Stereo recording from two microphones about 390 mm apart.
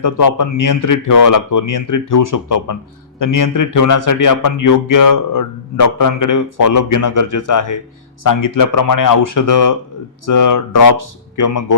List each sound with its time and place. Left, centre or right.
0.0 s a man's voice: left